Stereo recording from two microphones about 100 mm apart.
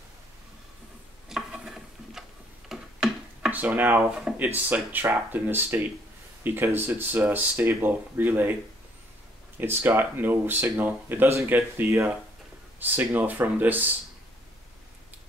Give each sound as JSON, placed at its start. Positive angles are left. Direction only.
{"t": 1.3, "sound": "stir", "side_deg": -5}
{"t": 2.7, "sound": "a sound", "side_deg": -10}
{"t": 4.6, "sound": "speech", "side_deg": -20}
{"t": 9.6, "sound": "speech", "side_deg": -20}